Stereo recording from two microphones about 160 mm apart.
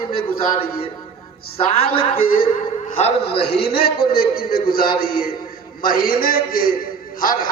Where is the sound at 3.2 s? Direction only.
90° left.